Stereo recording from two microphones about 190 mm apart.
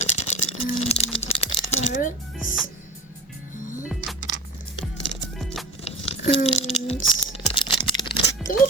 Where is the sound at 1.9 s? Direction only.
45° left (ahead or behind).